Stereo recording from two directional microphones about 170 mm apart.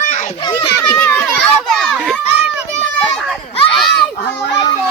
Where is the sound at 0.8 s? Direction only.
15° left (ahead or behind).